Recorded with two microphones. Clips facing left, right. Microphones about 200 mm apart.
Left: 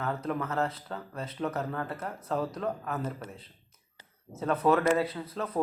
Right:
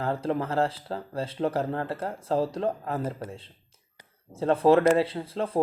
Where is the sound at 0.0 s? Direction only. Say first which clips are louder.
Right 4 dB; 30° right (ahead or behind).